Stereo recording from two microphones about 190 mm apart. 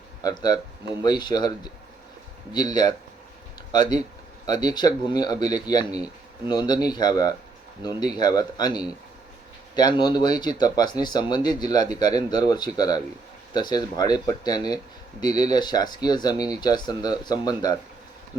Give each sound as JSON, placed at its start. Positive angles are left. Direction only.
{"t": 0.2, "sound": "speech", "side_deg": 20}